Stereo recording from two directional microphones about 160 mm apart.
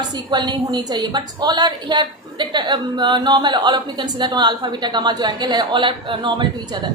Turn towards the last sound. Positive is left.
turn(degrees=-30)  # may be behind; listen again after turning